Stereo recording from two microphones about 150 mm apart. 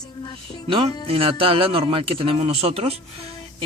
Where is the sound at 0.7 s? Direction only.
40° right (ahead or behind).